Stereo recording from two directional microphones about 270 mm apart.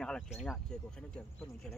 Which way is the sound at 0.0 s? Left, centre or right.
Centre.